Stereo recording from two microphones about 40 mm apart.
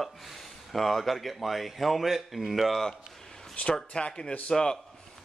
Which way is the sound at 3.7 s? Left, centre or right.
Left.